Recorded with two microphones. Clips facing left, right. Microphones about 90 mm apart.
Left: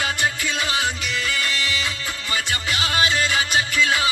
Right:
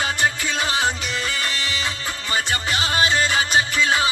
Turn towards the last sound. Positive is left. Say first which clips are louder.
# right 1 dB
turn(degrees=-30)  # may be behind; listen again after turning